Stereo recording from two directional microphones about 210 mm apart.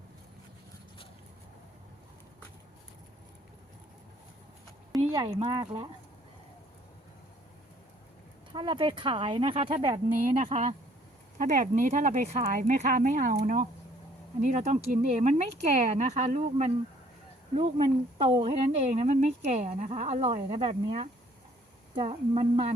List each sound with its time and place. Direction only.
4.9 s a sound: centre (ahead or behind)
5.4 s speech: 25° right (ahead or behind)
8.5 s a woman's voice: 25° right (ahead or behind)